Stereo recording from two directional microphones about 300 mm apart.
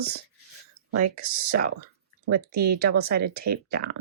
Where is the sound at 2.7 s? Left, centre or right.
Right.